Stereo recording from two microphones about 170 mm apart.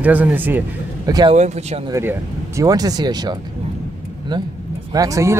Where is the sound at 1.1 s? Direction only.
20° right (ahead or behind).